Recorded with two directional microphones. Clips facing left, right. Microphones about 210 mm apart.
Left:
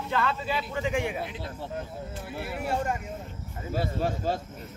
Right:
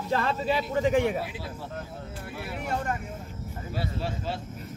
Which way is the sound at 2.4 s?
5° left (ahead or behind).